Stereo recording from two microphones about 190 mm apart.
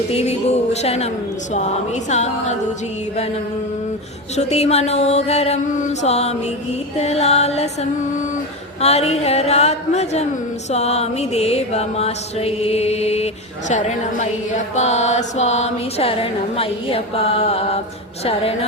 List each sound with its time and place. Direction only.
0.1 s music: 35° left (ahead or behind)
4.4 s music: 35° left (ahead or behind)